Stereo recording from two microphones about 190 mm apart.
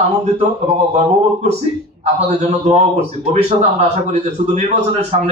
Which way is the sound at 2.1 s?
35° right (ahead or behind).